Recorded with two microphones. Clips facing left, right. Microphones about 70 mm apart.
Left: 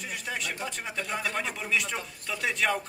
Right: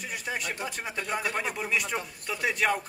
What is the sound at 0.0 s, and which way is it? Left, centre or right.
Speech, centre.